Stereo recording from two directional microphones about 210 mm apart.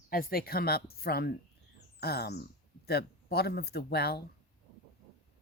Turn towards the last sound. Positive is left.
turn(degrees=50)  # may be behind; listen again after turning